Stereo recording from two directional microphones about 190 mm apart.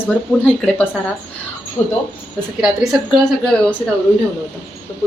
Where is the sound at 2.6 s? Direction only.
5° right (ahead or behind).